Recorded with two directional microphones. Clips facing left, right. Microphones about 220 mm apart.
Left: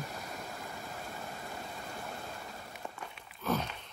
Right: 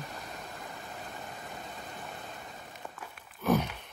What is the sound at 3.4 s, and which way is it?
Sigh, 15° right (ahead or behind).